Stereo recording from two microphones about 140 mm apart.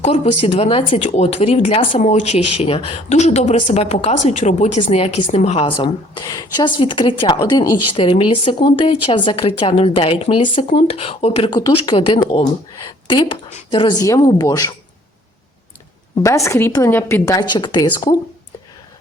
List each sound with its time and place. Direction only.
0.0 s speech: 50° left (ahead or behind)
1.0 s speech: 50° left (ahead or behind)
5.6 s a woman's voice: 35° left (ahead or behind)
7.9 s a woman's voice: 40° left (ahead or behind)
11.5 s a woman's voice: 30° left (ahead or behind)
16.2 s a woman's voice: 20° left (ahead or behind)